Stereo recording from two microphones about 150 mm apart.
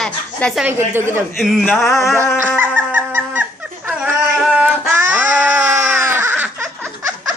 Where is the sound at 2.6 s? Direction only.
15° right (ahead or behind).